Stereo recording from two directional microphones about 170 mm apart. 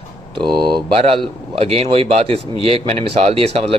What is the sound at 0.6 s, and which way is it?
Speech, 30° right (ahead or behind).